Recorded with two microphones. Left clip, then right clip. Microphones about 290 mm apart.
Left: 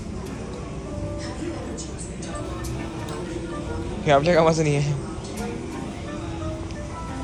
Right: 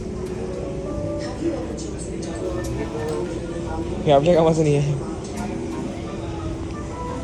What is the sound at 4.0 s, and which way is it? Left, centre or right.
Speech, left.